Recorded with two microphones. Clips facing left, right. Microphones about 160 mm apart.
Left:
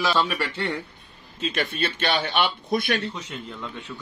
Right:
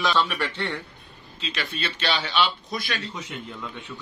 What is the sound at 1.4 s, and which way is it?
A man's voice, 50° left (ahead or behind).